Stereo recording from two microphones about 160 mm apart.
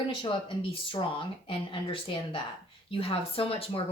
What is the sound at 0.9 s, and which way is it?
Speech, 35° left (ahead or behind).